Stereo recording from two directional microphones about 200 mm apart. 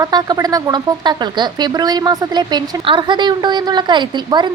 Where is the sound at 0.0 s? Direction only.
20° right (ahead or behind).